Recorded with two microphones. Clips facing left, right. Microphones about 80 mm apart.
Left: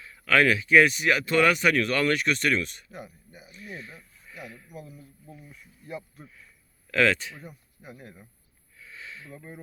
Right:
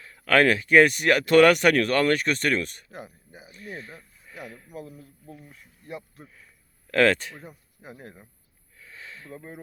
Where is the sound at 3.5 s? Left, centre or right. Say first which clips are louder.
Right 2 dB; right.